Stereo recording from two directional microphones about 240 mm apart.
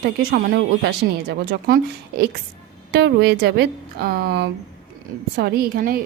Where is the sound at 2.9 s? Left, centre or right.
Right.